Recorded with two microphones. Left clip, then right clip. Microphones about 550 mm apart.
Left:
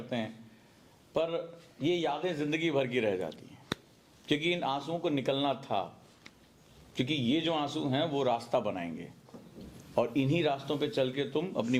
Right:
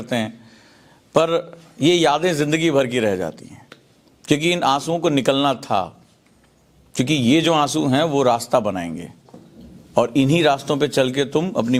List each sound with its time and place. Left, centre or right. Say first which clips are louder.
0.1 s a man's voice: right 13 dB; right
6.9 s a man's voice: right 13 dB; right